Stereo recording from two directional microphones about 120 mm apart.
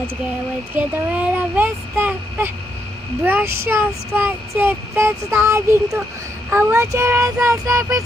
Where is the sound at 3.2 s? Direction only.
15° right (ahead or behind).